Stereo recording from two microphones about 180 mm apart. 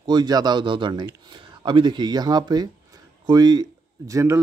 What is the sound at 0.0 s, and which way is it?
Speech, 25° right (ahead or behind).